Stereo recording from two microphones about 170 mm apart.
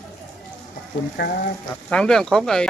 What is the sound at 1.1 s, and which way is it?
Frying, 75° left (ahead or behind).